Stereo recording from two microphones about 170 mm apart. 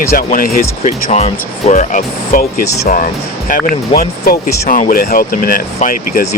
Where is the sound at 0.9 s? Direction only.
40° left (ahead or behind).